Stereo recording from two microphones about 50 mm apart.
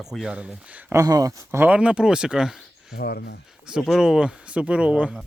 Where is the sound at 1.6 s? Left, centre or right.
Right.